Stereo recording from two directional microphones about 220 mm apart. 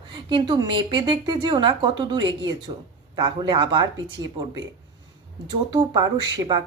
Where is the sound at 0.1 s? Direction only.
20° right (ahead or behind).